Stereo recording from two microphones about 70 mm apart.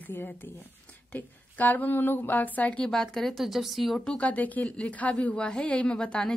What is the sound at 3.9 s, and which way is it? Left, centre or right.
Speech, centre.